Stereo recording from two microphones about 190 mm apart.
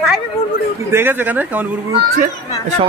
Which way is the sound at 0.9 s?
10° right (ahead or behind).